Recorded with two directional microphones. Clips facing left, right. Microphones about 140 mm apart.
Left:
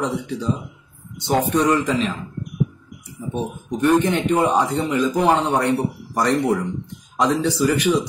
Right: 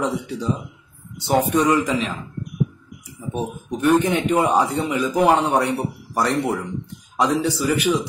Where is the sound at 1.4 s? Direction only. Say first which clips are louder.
Even; 10° right (ahead or behind).